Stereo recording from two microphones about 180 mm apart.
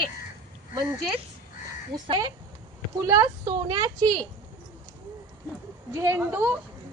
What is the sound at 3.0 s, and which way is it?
A woman's voice, 20° right (ahead or behind).